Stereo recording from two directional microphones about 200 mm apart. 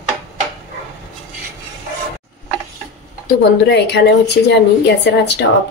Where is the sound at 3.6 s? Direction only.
55° left (ahead or behind).